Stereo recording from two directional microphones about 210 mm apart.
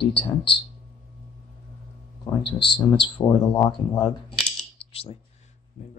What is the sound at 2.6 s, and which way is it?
Speech, 20° left (ahead or behind).